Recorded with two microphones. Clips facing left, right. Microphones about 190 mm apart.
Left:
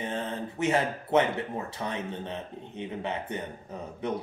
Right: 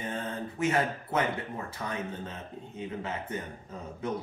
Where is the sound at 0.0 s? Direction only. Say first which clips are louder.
Left 2 dB; 25° left (ahead or behind).